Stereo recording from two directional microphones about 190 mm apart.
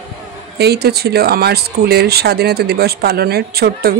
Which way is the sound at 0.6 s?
55° right (ahead or behind).